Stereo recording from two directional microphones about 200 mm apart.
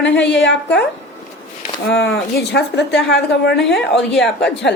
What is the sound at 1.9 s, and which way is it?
A woman's voice, 60° left (ahead or behind).